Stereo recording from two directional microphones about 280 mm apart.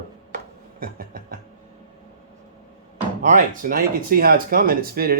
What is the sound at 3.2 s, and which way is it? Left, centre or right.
Speech, right.